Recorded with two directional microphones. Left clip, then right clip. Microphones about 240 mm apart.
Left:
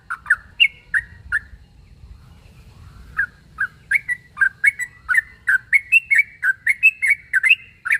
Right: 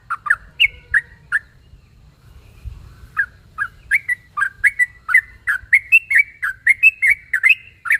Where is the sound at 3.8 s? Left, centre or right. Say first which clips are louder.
Right 3 dB; centre.